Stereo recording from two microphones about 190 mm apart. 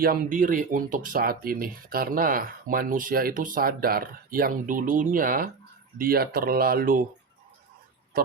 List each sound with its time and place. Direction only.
0.0 s speech: 50° right (ahead or behind)
8.1 s speech: 50° right (ahead or behind)